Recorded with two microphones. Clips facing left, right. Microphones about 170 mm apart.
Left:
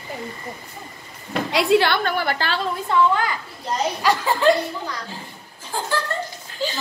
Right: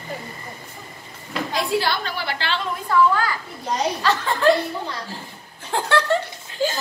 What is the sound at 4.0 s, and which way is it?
Speech, 10° left (ahead or behind).